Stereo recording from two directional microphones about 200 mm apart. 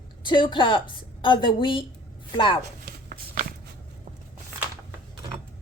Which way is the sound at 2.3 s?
25° left (ahead or behind).